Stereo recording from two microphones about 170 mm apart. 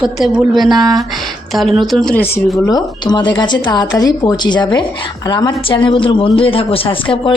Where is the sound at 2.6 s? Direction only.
25° left (ahead or behind).